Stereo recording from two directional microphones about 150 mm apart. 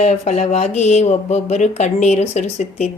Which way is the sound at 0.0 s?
50° left (ahead or behind).